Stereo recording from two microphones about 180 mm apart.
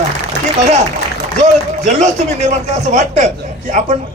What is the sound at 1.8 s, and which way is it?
A man's voice, 40° right (ahead or behind).